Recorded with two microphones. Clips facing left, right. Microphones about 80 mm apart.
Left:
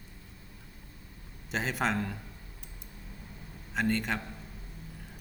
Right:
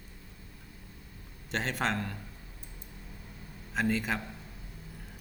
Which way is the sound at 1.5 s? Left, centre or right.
Centre.